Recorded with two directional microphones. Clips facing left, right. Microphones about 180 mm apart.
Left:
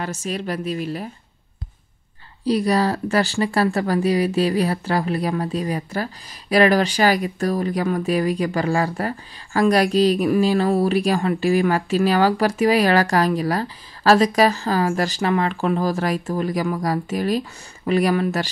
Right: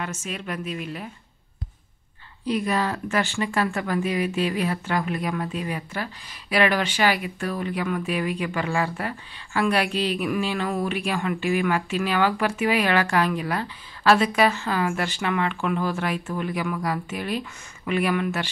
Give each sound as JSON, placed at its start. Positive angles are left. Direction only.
{"t": 0.0, "sound": "speech", "side_deg": 35}
{"t": 2.4, "sound": "speech", "side_deg": 35}